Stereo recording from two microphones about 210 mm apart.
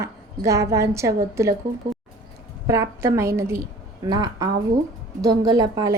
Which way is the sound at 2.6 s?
15° right (ahead or behind).